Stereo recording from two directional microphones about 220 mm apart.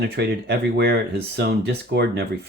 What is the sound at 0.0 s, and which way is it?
Speech, 50° right (ahead or behind).